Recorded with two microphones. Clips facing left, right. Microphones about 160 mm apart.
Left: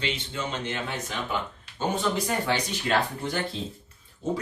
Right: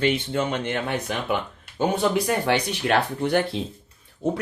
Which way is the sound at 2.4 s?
65° right (ahead or behind).